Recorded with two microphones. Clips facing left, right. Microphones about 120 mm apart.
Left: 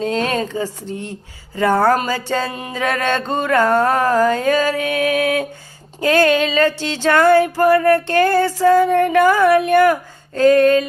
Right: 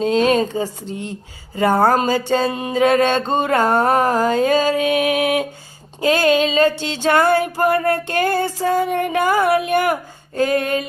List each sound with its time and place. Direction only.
0.0 s music: 20° right (ahead or behind)
1.5 s mantra: 20° right (ahead or behind)
6.0 s music: 15° right (ahead or behind)